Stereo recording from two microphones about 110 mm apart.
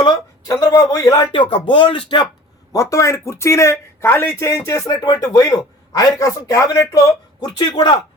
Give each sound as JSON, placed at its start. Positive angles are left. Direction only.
{"t": 0.0, "sound": "a sound", "side_deg": 40}
{"t": 0.6, "sound": "a man's voice", "side_deg": 25}
{"t": 1.3, "sound": "speech", "side_deg": 50}
{"t": 2.7, "sound": "a man's voice", "side_deg": 30}